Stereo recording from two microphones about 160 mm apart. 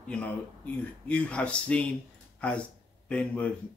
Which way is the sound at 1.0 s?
10° left (ahead or behind).